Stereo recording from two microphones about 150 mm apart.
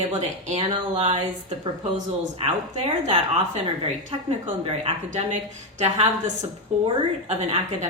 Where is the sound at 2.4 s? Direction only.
40° right (ahead or behind).